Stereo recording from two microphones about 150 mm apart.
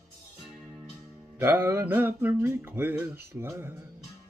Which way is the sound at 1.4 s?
15° right (ahead or behind).